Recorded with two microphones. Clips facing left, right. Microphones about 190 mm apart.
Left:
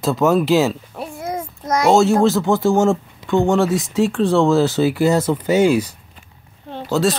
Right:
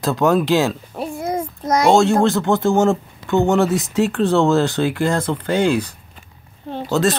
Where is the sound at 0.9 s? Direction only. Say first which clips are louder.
Right 3 dB; 30° right (ahead or behind).